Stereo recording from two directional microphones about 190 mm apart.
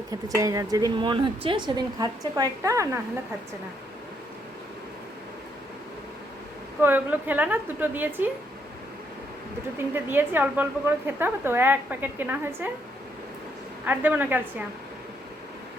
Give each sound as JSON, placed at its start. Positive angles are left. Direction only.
{"t": 0.1, "sound": "speech", "side_deg": -20}
{"t": 6.8, "sound": "a woman's voice", "side_deg": -10}
{"t": 9.7, "sound": "a woman's voice", "side_deg": -10}
{"t": 13.8, "sound": "a woman's voice", "side_deg": -10}